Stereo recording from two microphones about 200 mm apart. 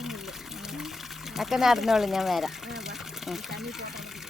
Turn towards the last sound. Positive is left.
turn(degrees=0)  # may be behind; listen again after turning